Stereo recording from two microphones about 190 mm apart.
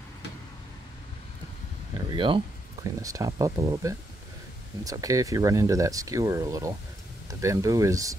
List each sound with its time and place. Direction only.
2.0 s speech: 25° right (ahead or behind)